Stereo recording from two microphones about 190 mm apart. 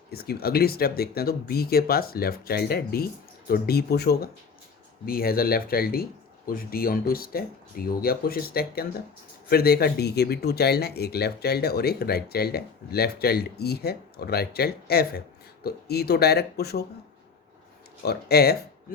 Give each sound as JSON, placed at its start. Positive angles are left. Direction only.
{"t": 0.1, "sound": "speech", "side_deg": 55}
{"t": 18.0, "sound": "speech", "side_deg": 55}